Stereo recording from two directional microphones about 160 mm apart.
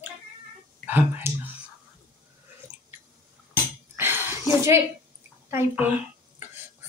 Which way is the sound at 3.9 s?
15° right (ahead or behind).